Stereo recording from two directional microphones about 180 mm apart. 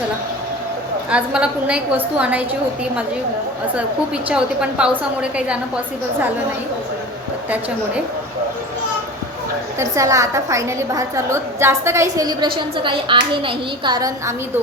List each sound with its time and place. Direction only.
1.1 s a woman's voice: 5° right (ahead or behind)
4.3 s a woman's voice: 5° right (ahead or behind)
9.7 s a woman's voice: 15° right (ahead or behind)